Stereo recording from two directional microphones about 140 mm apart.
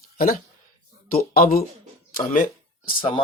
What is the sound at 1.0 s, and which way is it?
Speech, 90° left.